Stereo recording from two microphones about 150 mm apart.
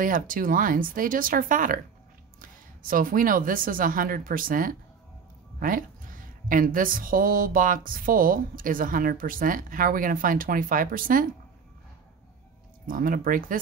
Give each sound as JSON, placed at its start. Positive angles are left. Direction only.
{"t": 0.0, "sound": "speech", "side_deg": -65}
{"t": 12.8, "sound": "speech", "side_deg": -65}